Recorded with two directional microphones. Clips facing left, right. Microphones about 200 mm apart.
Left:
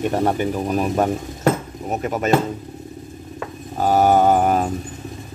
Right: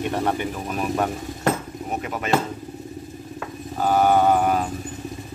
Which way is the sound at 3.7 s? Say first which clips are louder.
Left 3 dB; 40° left (ahead or behind).